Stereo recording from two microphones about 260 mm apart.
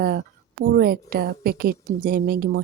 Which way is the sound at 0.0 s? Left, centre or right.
Right.